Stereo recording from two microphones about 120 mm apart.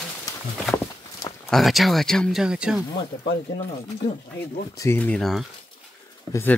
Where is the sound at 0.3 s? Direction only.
30° left (ahead or behind).